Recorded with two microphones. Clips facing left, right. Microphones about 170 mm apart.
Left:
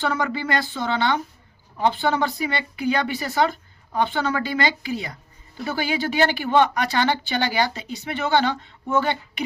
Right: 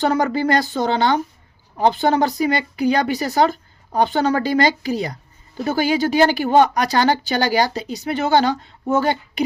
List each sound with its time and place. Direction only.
0.0 s speech: 40° right (ahead or behind)